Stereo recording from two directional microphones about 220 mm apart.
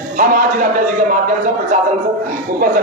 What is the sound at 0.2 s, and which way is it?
Speech, 40° right (ahead or behind).